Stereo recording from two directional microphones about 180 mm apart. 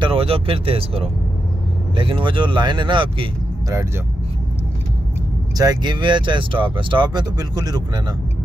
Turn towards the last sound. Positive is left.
turn(degrees=-20)  # may be behind; listen again after turning